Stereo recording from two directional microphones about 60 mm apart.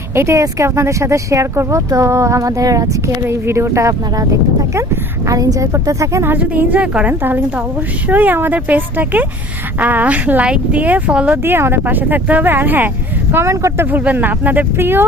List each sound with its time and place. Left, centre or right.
0.1 s speech: right
3.2 s speech: right
5.4 s speech: right
6.4 s a woman's voice: right
7.1 s speech: right
11.4 s speech: right
13.3 s speech: right
14.0 s speech: right